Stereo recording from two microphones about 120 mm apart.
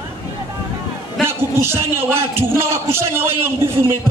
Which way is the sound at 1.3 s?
20° right (ahead or behind).